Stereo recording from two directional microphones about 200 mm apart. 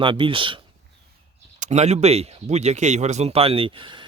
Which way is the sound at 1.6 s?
35° right (ahead or behind).